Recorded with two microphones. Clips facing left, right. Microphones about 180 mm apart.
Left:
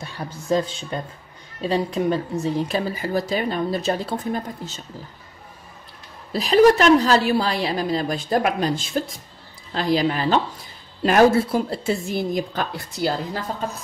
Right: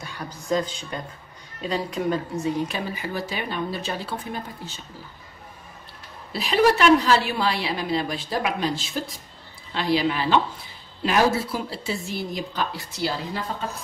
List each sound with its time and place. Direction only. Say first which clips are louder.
0.0 s a man's voice: left 3 dB; 30° left (ahead or behind)
6.3 s a woman's voice: left 5 dB; 40° left (ahead or behind)